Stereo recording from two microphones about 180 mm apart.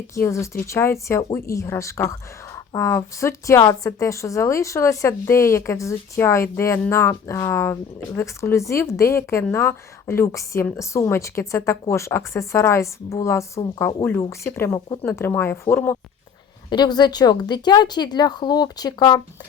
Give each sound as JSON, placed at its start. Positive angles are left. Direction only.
{"t": 0.1, "sound": "speech", "side_deg": 15}
{"t": 16.6, "sound": "a woman's voice", "side_deg": 25}